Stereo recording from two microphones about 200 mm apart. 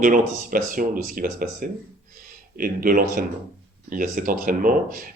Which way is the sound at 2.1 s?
45° right (ahead or behind).